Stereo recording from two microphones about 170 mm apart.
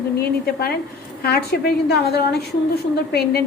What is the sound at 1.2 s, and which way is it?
A woman's voice, 70° left (ahead or behind).